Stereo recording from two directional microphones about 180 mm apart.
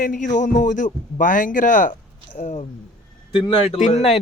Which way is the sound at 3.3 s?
30° left (ahead or behind).